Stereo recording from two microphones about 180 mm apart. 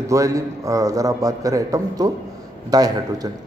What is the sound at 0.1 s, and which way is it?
A man's voice, 20° right (ahead or behind).